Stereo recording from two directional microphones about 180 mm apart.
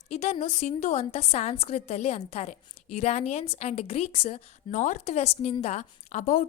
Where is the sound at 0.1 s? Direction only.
40° left (ahead or behind).